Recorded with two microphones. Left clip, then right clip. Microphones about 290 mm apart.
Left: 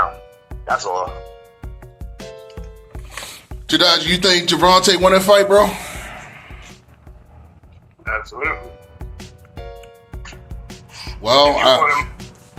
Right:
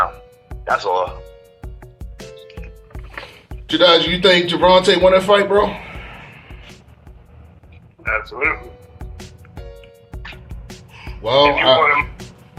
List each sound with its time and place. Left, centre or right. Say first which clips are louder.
0.0 s music: even; centre
3.7 s a man's voice: right 2 dB; left
8.0 s speech: right 3 dB; centre
9.0 s music: even; centre
11.2 s a man's voice: left 1 dB; left
11.8 s speech: right 1 dB; centre